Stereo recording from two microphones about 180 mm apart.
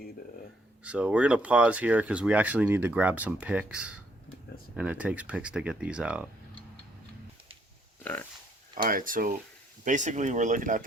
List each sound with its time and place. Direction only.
0.9 s speech: 5° right (ahead or behind)
8.0 s speech: 10° left (ahead or behind)
8.7 s speech: 50° right (ahead or behind)